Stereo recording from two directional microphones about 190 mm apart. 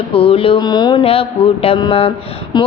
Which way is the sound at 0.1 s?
30° left (ahead or behind).